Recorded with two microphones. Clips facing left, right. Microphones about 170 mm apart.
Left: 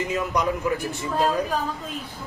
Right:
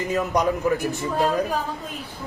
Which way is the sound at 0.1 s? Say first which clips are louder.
Right 6 dB; 45° right (ahead or behind).